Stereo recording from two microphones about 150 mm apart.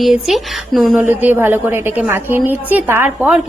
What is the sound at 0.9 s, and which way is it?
A woman's voice, 15° right (ahead or behind).